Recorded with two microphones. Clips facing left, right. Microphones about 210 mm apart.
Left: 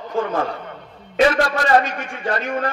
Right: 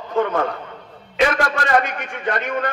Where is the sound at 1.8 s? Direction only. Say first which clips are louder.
Even; 30° left (ahead or behind).